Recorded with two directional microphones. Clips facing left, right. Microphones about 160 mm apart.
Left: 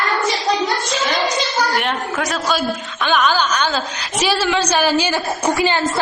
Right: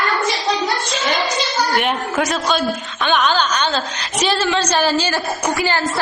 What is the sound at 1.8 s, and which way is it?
A man's voice, centre (ahead or behind).